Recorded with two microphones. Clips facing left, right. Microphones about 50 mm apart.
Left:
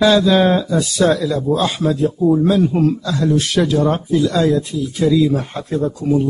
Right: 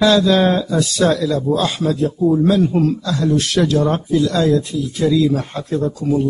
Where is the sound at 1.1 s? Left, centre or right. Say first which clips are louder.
Even; centre.